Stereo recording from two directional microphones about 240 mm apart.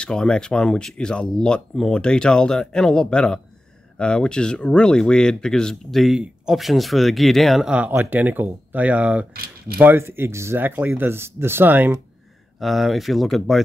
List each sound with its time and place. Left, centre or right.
0.0 s speech: centre
9.3 s speech: right
9.8 s speech: centre